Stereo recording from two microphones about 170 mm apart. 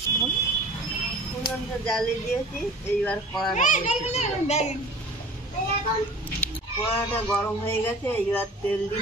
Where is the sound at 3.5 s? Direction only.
45° left (ahead or behind).